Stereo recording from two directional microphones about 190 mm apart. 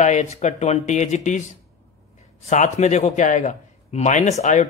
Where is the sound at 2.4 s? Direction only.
40° left (ahead or behind).